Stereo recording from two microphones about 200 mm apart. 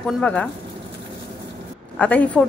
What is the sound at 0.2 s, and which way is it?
Speech, 5° left (ahead or behind).